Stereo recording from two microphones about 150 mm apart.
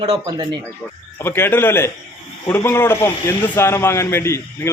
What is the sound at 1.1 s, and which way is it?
A man's voice, 15° left (ahead or behind).